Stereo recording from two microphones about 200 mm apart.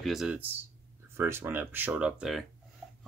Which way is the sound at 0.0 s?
Centre (ahead or behind).